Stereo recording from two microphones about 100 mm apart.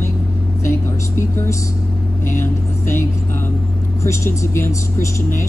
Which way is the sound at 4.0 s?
25° left (ahead or behind).